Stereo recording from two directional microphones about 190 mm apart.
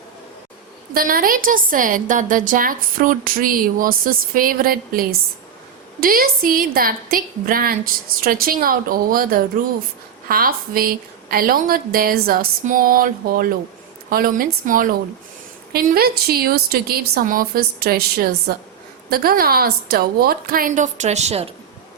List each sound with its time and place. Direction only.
0.9 s a woman's voice: 50° right (ahead or behind)